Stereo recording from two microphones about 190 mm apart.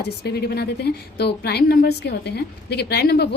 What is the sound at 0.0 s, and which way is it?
A woman's voice, 60° left (ahead or behind).